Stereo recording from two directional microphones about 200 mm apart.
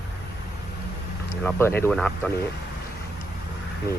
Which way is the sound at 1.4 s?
10° left (ahead or behind).